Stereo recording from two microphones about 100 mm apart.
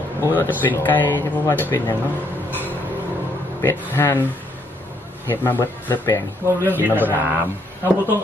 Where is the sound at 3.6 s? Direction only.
25° left (ahead or behind).